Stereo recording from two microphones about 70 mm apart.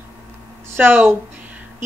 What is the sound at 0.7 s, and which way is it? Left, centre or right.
Speech, right.